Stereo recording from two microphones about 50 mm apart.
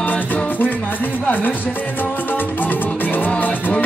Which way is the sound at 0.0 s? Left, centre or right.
Left.